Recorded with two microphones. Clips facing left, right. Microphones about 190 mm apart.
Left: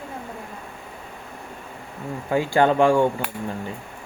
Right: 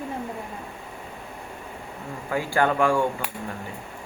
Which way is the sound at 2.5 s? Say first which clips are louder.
Left 4 dB; 25° left (ahead or behind).